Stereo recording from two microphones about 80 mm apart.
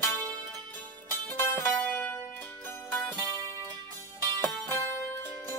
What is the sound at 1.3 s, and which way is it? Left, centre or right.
Music, left.